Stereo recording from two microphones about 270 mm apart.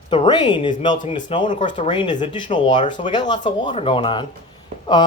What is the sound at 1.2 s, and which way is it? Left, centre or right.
Speech, centre.